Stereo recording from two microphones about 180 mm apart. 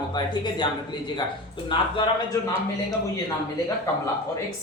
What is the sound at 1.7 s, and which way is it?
Speech, 25° left (ahead or behind).